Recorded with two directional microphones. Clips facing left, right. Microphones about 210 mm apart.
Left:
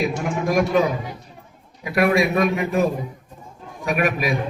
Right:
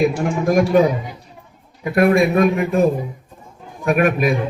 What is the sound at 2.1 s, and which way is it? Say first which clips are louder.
A man's voice: right 4 dB; 50° right (ahead or behind).